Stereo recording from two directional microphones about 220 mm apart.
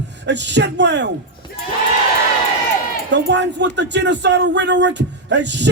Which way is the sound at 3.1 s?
55° right (ahead or behind).